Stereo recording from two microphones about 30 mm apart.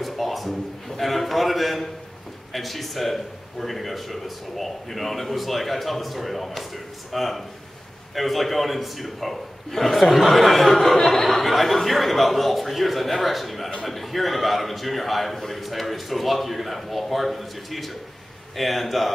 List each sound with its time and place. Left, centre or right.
0.0 s a sound: centre
2.5 s a man's voice: centre
11.0 s speech: centre
11.2 s a man's voice: centre